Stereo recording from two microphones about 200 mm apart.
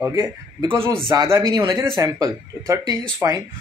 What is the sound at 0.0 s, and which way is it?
Speech, 15° right (ahead or behind).